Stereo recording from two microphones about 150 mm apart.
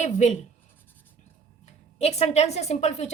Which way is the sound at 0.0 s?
50° left (ahead or behind).